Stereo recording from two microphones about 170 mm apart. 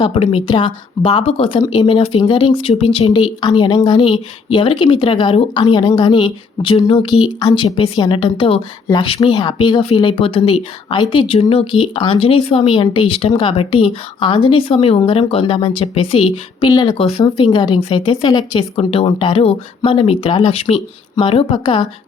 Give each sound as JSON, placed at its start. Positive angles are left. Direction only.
{"t": 0.0, "sound": "a woman's voice", "side_deg": 35}